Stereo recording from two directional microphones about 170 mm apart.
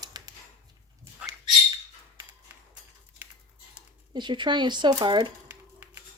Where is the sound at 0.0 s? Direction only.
25° right (ahead or behind).